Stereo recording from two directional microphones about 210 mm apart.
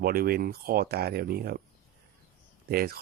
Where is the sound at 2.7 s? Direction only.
45° right (ahead or behind).